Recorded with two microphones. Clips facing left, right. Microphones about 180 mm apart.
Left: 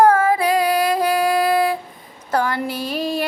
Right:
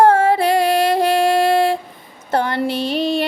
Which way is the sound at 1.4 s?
25° right (ahead or behind).